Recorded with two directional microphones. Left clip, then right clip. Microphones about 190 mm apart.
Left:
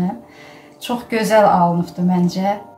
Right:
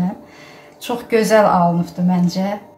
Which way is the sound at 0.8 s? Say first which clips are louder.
Right 3 dB; 5° right (ahead or behind).